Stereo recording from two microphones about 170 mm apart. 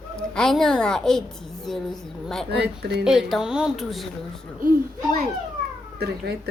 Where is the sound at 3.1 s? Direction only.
Centre (ahead or behind).